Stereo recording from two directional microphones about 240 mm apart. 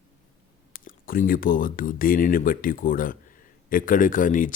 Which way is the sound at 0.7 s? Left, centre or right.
Left.